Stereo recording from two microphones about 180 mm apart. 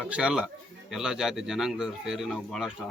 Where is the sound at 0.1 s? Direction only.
5° right (ahead or behind).